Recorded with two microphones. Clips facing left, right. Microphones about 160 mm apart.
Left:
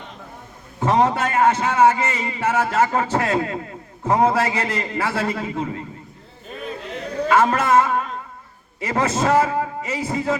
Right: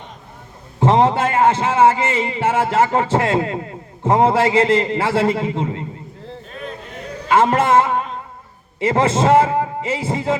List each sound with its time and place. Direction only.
0.8 s a man's voice: 25° right (ahead or behind)
7.3 s a man's voice: 25° right (ahead or behind)